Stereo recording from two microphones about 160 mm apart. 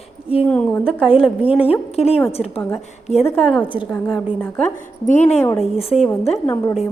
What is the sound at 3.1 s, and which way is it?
Speech, 40° left (ahead or behind).